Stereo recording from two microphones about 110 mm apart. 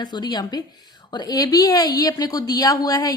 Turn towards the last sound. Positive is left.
turn(degrees=35)  # may be behind; listen again after turning